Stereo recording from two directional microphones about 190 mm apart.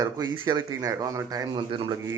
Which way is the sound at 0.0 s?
20° right (ahead or behind).